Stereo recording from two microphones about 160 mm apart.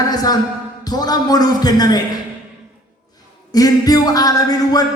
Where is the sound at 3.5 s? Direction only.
25° left (ahead or behind).